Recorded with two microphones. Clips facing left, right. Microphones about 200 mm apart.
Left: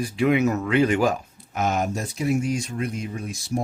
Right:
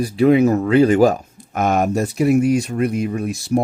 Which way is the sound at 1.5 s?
55° right (ahead or behind).